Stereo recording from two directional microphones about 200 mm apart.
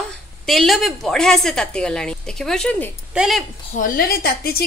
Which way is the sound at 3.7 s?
45° left (ahead or behind).